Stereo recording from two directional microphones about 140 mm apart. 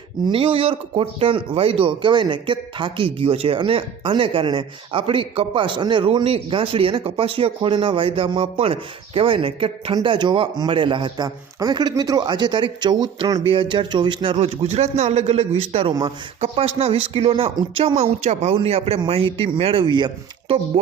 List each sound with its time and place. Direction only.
0.3 s a man's voice: 40° right (ahead or behind)